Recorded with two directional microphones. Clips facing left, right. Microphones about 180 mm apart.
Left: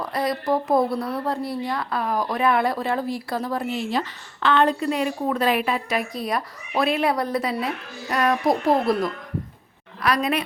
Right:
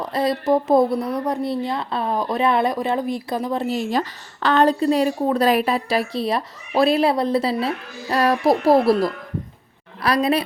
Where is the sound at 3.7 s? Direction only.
45° right (ahead or behind).